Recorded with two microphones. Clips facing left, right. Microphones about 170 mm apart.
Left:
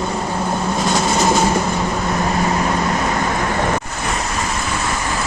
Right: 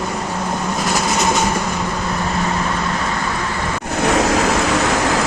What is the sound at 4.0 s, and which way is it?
Waves, 85° right.